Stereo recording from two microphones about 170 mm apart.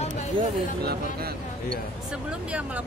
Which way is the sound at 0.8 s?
65° right (ahead or behind).